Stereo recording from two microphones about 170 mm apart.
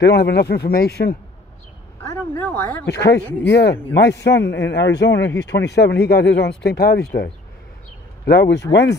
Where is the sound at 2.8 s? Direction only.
80° left.